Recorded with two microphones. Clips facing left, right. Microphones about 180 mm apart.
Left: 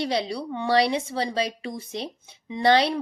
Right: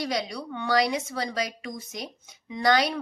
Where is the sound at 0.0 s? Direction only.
30° left (ahead or behind).